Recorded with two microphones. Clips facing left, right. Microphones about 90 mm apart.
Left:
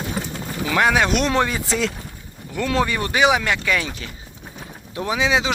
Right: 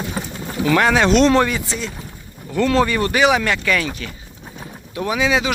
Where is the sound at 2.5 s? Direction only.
15° left (ahead or behind).